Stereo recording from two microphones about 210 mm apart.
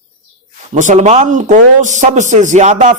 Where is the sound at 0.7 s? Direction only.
35° right (ahead or behind).